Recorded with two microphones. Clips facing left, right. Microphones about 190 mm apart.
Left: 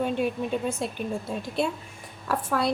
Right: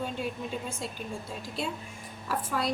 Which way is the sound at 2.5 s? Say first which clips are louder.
Left 5 dB; 65° left (ahead or behind).